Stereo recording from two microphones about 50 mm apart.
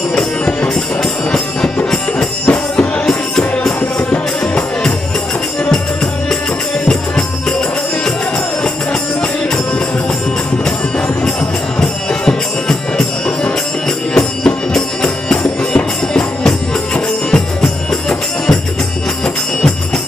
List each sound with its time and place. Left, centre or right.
2.4 s music: left
3.1 s music: centre
6.9 s music: centre
11.8 s music: centre